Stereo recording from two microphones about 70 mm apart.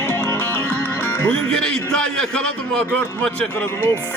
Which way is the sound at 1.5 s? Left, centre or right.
Centre.